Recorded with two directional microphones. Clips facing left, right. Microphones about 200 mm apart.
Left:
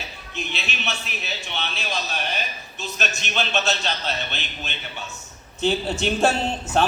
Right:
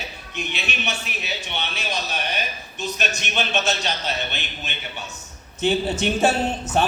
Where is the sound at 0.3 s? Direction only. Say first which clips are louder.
Right 2 dB; 15° right (ahead or behind).